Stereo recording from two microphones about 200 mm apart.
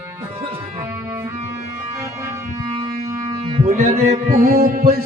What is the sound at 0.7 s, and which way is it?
Music, 15° right (ahead or behind).